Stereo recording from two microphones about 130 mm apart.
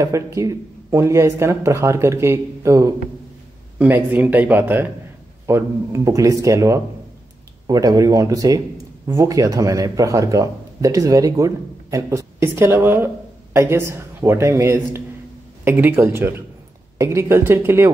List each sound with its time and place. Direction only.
0.0 s a man's voice: 25° right (ahead or behind)